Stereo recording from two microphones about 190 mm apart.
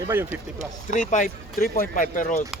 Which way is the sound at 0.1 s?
10° right (ahead or behind).